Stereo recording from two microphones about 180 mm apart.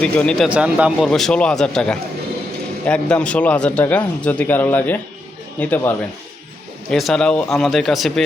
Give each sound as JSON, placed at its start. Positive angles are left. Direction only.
{"t": 0.0, "sound": "speech", "side_deg": 5}
{"t": 0.4, "sound": "speech", "side_deg": -5}